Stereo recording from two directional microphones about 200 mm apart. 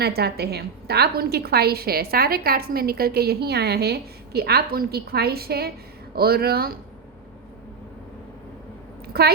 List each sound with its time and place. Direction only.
0.0 s a woman's voice: 55° right (ahead or behind)
9.2 s a woman's voice: 50° right (ahead or behind)